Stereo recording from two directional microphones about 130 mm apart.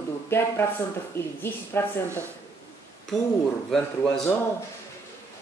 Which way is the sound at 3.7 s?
5° left (ahead or behind).